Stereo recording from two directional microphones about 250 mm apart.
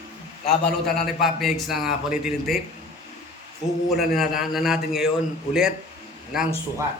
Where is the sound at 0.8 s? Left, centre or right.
Centre.